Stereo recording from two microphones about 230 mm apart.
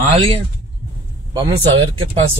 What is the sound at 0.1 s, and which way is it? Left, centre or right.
Speech, right.